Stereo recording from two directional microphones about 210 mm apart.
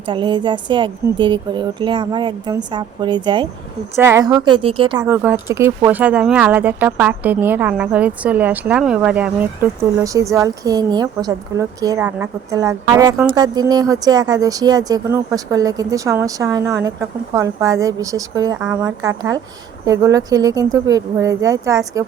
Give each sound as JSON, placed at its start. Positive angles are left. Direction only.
{"t": 0.0, "sound": "speech", "side_deg": -25}
{"t": 5.0, "sound": "speech", "side_deg": -10}